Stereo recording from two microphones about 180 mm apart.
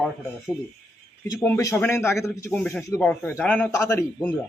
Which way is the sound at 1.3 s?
15° left (ahead or behind).